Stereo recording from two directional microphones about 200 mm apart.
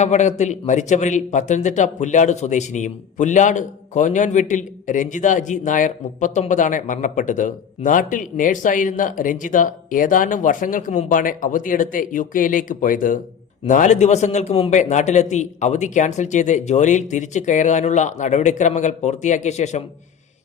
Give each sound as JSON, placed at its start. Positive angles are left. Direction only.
{"t": 0.0, "sound": "a man's voice", "side_deg": 35}